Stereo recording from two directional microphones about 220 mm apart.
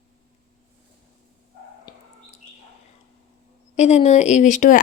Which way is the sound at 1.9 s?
20° left (ahead or behind).